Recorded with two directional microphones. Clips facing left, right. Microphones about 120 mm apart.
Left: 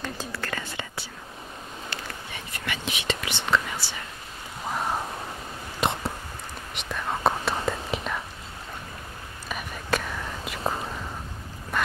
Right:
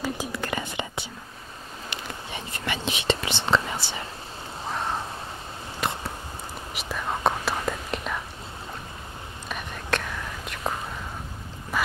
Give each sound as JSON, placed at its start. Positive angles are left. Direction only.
{"t": 0.0, "sound": "whispering", "side_deg": -15}
{"t": 5.8, "sound": "a sound", "side_deg": 20}
{"t": 6.7, "sound": "whispering", "side_deg": -5}
{"t": 9.5, "sound": "whispering", "side_deg": 5}
{"t": 11.7, "sound": "quack", "side_deg": -5}